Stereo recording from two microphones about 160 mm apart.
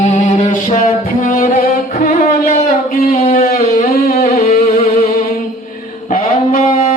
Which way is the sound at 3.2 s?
65° left (ahead or behind).